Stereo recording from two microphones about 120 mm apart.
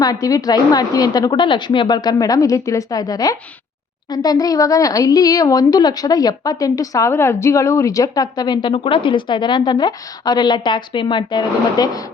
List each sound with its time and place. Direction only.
0.0 s a woman's voice: 30° left (ahead or behind)